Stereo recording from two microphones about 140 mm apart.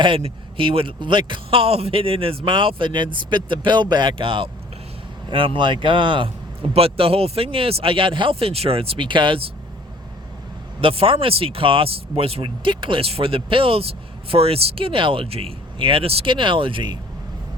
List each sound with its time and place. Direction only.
0.0 s speech: 40° right (ahead or behind)
10.8 s speech: 40° right (ahead or behind)